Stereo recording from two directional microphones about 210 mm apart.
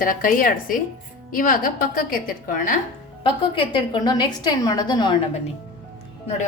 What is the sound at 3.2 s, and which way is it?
A woman's voice, 25° left (ahead or behind).